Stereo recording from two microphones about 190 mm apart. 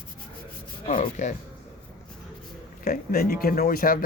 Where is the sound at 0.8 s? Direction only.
35° left (ahead or behind).